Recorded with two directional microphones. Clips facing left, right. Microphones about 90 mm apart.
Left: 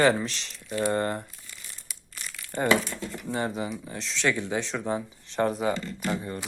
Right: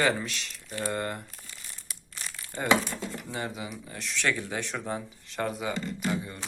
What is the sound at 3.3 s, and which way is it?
Speech, 35° left (ahead or behind).